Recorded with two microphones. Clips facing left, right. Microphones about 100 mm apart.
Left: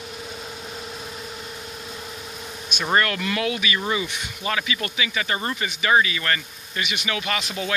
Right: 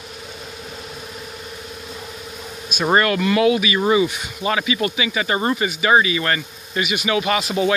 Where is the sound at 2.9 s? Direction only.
10° right (ahead or behind).